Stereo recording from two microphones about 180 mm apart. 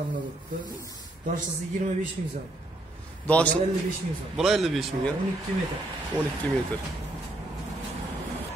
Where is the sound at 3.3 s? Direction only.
5° left (ahead or behind).